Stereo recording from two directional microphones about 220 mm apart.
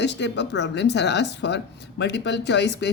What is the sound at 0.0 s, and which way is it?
Speech, 50° left (ahead or behind).